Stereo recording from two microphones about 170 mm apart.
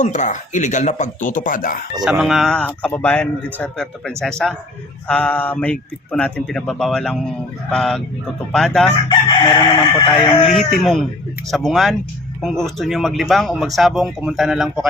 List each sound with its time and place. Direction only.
0.0 s speech: 45° left (ahead or behind)
2.0 s speech: centre (ahead or behind)
9.0 s chicken: 25° left (ahead or behind)
10.2 s speech: 35° left (ahead or behind)
10.5 s speech: centre (ahead or behind)